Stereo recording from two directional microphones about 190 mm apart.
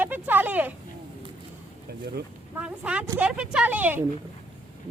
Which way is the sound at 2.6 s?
5° right (ahead or behind).